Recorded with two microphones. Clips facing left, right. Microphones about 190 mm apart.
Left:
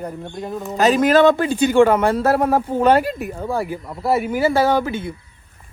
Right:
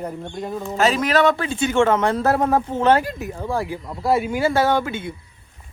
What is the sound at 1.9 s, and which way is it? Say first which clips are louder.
Speech: left 2 dB; 10° left (ahead or behind).